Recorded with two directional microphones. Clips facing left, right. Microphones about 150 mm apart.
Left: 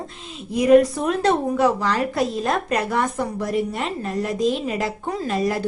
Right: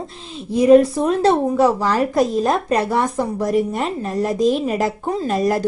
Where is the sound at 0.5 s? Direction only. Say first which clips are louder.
Right 3 dB; 30° right (ahead or behind).